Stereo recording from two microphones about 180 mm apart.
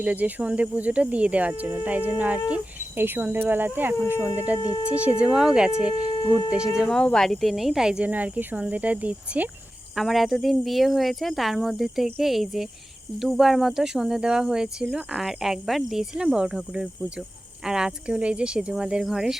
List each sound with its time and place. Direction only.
0.0 s speech: 10° right (ahead or behind)
4.6 s speech: 20° left (ahead or behind)
4.9 s speech: 5° right (ahead or behind)